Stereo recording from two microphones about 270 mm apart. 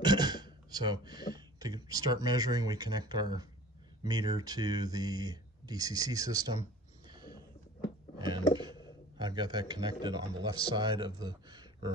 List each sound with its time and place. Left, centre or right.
0.0 s speech: centre
8.5 s a sound: centre
9.2 s speech: centre